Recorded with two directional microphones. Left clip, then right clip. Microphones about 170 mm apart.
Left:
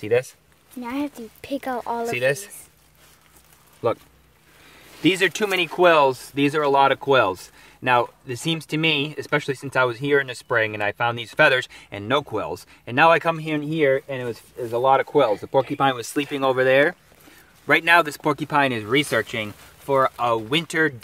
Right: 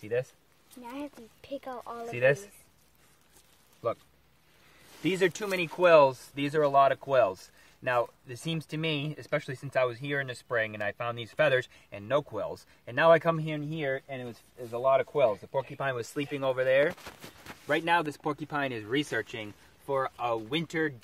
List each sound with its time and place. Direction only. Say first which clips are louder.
0.0 s speech: left 11 dB; 60° left (ahead or behind)
0.8 s speech: left 12 dB; 20° left (ahead or behind)
2.1 s speech: left 2 dB; 65° left (ahead or behind)
5.0 s speech: left 9 dB; 25° left (ahead or behind)
12.3 s speech: left 8 dB; 15° left (ahead or behind)
15.5 s speech: left 12 dB; 30° left (ahead or behind)
17.6 s speech: left 10 dB; 30° left (ahead or behind)
18.6 s speech: left 11 dB; 10° left (ahead or behind)